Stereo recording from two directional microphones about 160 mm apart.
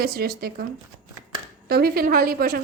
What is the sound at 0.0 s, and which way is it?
Speech, 70° right (ahead or behind).